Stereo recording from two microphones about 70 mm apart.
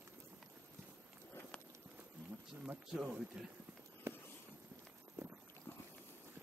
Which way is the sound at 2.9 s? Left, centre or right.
Centre.